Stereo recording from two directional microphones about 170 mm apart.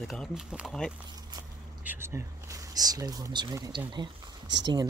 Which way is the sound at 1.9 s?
15° right (ahead or behind).